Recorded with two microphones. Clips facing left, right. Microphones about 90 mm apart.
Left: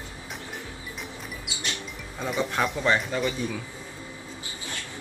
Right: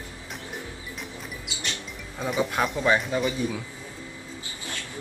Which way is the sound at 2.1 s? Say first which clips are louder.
Right 1 dB; 5° right (ahead or behind).